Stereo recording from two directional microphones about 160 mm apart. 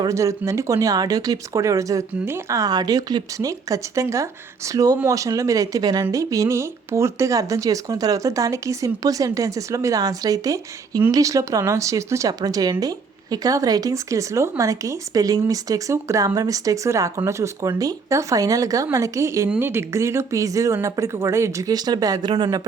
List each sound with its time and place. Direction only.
0.0 s speech: 20° right (ahead or behind)